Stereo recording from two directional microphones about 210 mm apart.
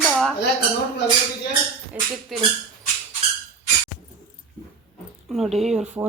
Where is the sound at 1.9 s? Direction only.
5° right (ahead or behind).